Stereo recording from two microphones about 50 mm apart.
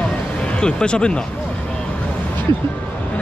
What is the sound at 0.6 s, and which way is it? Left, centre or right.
Speech, centre.